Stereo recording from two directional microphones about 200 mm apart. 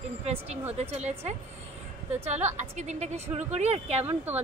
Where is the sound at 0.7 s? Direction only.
30° right (ahead or behind).